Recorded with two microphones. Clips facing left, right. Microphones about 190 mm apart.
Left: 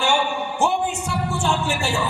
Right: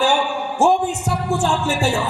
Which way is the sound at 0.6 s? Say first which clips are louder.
Right 6 dB; 40° right (ahead or behind).